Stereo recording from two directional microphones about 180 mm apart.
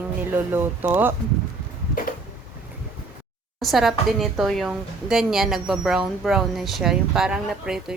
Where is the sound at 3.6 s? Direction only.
Centre (ahead or behind).